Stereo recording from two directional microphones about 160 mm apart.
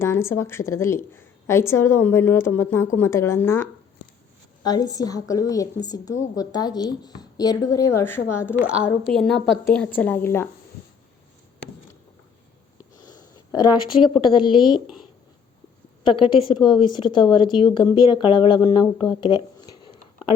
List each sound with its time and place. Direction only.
0.0 s a woman's voice: 15° left (ahead or behind)
9.1 s a woman's voice: 5° left (ahead or behind)
13.0 s a sound: 25° left (ahead or behind)
14.3 s a woman's voice: 30° left (ahead or behind)
16.0 s a woman's voice: 30° left (ahead or behind)
19.0 s a sound: 30° left (ahead or behind)